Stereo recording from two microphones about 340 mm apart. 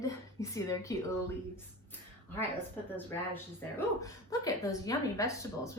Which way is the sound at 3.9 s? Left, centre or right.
Centre.